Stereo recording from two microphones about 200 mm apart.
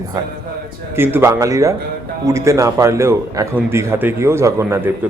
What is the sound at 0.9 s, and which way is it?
A man's voice, 10° right (ahead or behind).